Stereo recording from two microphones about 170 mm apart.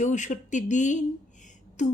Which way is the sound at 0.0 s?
45° left (ahead or behind).